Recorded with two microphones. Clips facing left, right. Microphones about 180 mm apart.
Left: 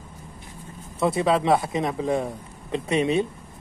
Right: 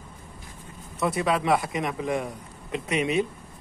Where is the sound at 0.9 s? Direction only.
25° left (ahead or behind).